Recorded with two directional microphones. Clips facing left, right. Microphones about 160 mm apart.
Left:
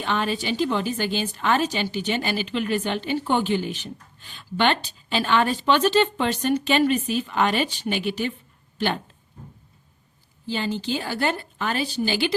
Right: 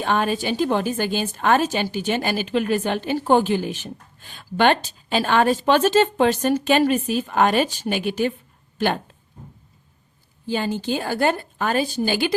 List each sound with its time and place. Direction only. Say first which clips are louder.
0.0 s a woman's voice: right 4 dB; 45° right (ahead or behind)
10.4 s a woman's voice: right 3 dB; 50° right (ahead or behind)